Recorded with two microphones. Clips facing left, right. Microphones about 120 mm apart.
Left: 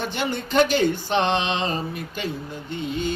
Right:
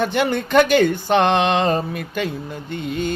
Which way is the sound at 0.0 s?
55° right (ahead or behind).